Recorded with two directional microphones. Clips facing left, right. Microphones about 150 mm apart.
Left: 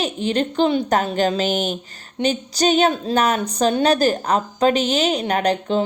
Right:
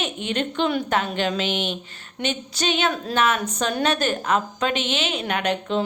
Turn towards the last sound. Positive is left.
turn(degrees=35)  # may be behind; listen again after turning